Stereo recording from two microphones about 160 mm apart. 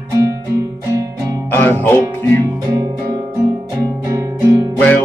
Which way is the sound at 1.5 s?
15° left (ahead or behind).